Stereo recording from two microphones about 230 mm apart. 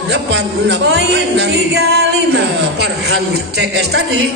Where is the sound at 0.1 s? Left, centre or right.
Right.